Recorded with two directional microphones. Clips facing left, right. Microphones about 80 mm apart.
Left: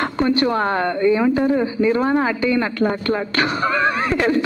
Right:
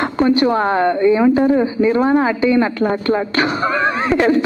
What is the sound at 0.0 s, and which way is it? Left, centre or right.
A woman's voice, centre.